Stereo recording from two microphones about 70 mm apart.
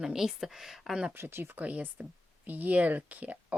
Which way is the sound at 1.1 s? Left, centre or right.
Right.